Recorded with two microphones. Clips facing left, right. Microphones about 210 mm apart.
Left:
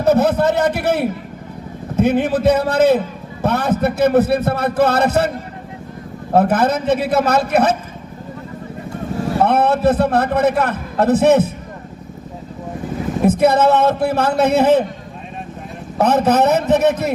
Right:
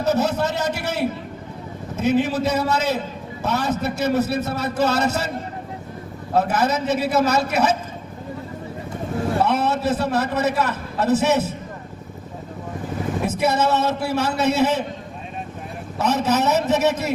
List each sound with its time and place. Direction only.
0.0 s a man's voice: 55° left (ahead or behind)
6.3 s a man's voice: 55° left (ahead or behind)
9.4 s a man's voice: 55° left (ahead or behind)
13.2 s a man's voice: 55° left (ahead or behind)
16.0 s a man's voice: 55° left (ahead or behind)